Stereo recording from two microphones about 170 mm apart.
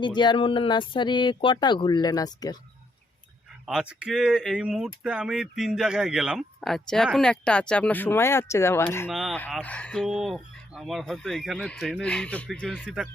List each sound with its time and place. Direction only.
0.0 s speech: 25° left (ahead or behind)
3.7 s speech: 5° right (ahead or behind); by 9.0 s 15° left (ahead or behind)
9.0 s speech: centre (ahead or behind)